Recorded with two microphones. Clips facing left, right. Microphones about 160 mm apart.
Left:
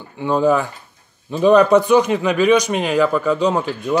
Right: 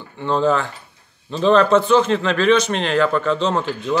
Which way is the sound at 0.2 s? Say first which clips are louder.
Left 2 dB; 10° left (ahead or behind).